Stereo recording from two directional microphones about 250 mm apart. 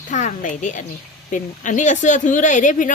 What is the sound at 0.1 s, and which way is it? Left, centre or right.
A woman's voice, left.